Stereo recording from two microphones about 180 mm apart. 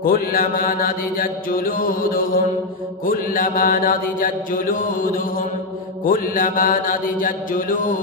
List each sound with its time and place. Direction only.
0.0 s mantra: 55° left (ahead or behind)